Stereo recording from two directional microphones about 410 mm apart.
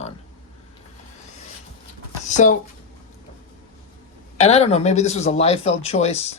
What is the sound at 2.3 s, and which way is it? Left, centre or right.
Speech, centre.